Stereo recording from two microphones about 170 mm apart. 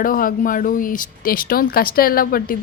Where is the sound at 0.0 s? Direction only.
55° left (ahead or behind).